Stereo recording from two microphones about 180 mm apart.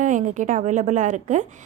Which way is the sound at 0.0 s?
45° right (ahead or behind).